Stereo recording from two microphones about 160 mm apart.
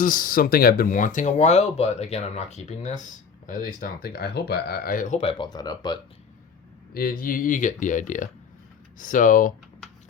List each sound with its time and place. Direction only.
0.0 s speech: 60° left (ahead or behind); by 6.0 s 25° left (ahead or behind)
6.9 s speech: 65° left (ahead or behind)